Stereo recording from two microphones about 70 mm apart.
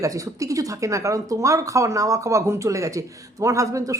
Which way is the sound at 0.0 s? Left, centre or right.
Right.